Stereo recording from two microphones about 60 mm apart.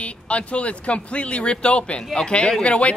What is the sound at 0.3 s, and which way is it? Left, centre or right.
A man's voice, left.